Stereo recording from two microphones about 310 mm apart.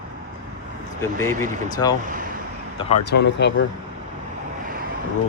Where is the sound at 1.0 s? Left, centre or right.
Centre.